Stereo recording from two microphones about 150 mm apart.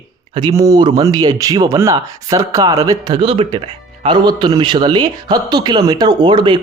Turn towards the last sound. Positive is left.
turn(degrees=-30)  # may be behind; listen again after turning